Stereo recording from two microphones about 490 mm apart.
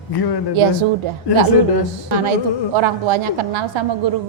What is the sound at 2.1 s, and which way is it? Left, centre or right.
A woman's voice, right.